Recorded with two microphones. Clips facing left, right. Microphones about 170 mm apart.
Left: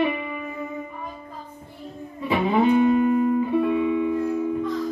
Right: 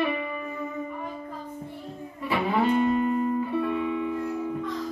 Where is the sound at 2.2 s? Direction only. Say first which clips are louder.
Left 4 dB; 20° left (ahead or behind).